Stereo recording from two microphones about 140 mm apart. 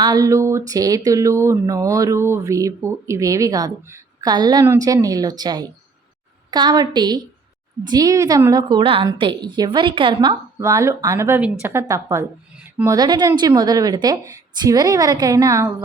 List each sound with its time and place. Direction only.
0.0 s speech: 25° right (ahead or behind)
8.8 s a woman's voice: 40° right (ahead or behind)
10.6 s speech: 20° right (ahead or behind)